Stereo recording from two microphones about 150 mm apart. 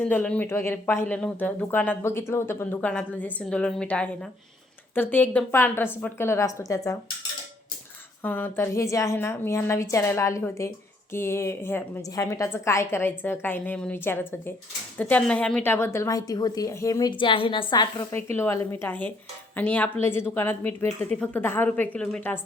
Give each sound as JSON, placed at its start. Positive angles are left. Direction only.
{"t": 0.0, "sound": "speech", "side_deg": 10}
{"t": 8.2, "sound": "a woman's voice", "side_deg": 10}
{"t": 18.1, "sound": "speech", "side_deg": 15}